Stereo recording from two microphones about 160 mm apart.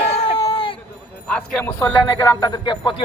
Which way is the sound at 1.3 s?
5° left (ahead or behind).